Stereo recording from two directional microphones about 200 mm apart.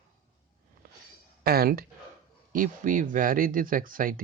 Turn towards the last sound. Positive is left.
turn(degrees=-45)  # may be behind; listen again after turning